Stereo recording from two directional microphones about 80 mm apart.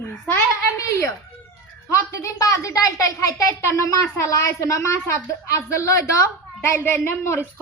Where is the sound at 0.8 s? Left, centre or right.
Left.